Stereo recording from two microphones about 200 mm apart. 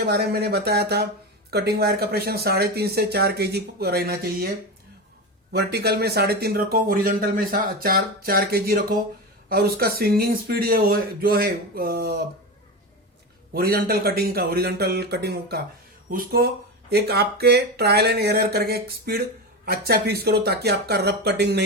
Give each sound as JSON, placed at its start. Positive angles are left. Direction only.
{"t": 0.0, "sound": "speech", "side_deg": -55}
{"t": 13.5, "sound": "speech", "side_deg": -50}